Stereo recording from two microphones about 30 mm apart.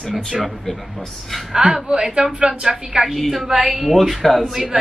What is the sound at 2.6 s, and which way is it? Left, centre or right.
Speech, centre.